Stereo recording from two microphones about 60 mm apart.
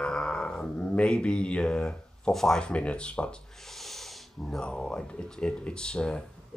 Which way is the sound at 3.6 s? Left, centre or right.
Centre.